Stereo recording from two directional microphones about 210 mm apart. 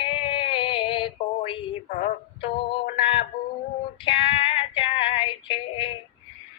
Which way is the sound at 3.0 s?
25° left (ahead or behind).